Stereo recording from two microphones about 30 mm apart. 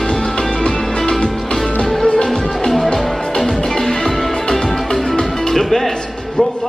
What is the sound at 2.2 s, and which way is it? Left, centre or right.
Music, centre.